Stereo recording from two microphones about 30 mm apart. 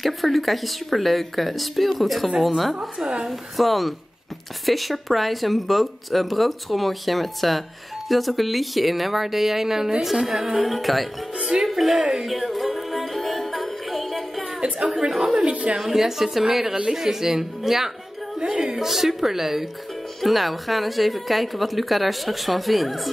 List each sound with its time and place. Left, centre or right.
0.0 s speech: centre
10.6 s speech: centre
11.3 s speech: right
11.6 s speech: centre
12.3 s music: centre
14.9 s speech: centre